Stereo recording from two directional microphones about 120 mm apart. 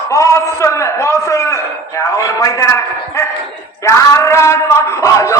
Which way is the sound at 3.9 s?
25° left (ahead or behind).